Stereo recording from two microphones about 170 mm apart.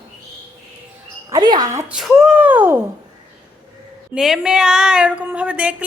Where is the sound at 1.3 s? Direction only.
25° right (ahead or behind).